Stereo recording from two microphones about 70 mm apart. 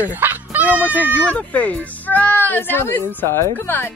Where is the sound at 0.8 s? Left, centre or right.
Left.